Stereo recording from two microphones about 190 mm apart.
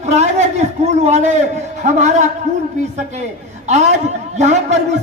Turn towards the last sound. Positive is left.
turn(degrees=-35)  # may be behind; listen again after turning